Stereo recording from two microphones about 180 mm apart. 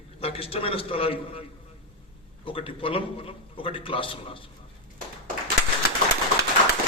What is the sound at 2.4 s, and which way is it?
A man's voice, 30° left (ahead or behind).